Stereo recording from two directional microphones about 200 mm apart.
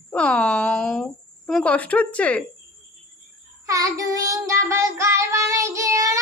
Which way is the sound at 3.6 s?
15° right (ahead or behind).